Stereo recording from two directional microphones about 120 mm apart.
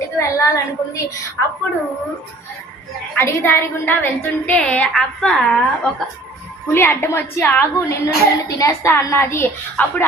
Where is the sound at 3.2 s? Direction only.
20° left (ahead or behind).